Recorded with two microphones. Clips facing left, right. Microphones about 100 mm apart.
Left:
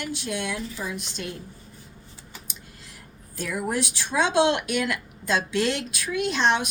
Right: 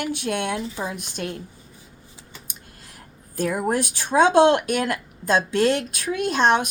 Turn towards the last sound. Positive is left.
turn(degrees=-45)  # may be behind; listen again after turning